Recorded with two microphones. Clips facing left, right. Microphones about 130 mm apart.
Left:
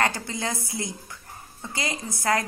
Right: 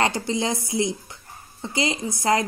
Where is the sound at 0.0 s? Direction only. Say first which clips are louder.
Right 4 dB; 20° right (ahead or behind).